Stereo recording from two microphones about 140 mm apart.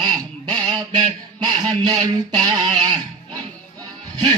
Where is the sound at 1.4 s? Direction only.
30° right (ahead or behind).